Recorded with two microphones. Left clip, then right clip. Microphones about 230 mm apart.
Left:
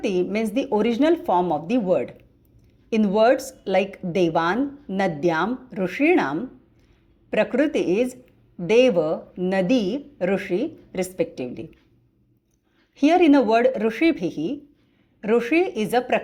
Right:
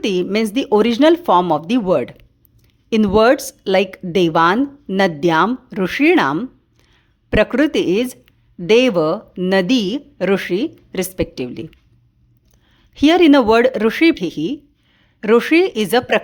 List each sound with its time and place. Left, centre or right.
0.0 s speech: right
12.9 s speech: right